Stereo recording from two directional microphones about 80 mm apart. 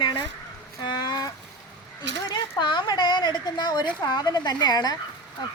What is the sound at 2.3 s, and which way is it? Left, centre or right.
A woman's voice, left.